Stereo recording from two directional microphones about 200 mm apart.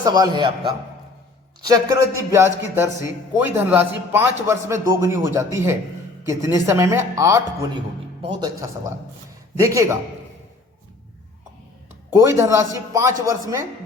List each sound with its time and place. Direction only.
0.0 s a man's voice: 20° right (ahead or behind)
12.1 s speech: 15° right (ahead or behind)